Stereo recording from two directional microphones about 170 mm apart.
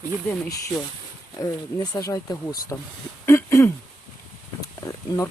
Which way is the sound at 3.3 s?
15° left (ahead or behind).